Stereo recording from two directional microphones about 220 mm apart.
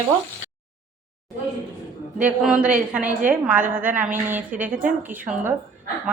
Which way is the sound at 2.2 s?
5° right (ahead or behind).